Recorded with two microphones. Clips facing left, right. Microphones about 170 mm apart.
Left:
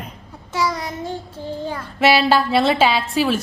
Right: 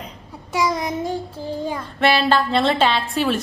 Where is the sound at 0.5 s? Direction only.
15° right (ahead or behind).